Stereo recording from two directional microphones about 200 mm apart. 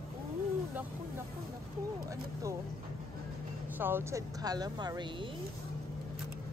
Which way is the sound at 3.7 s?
10° right (ahead or behind).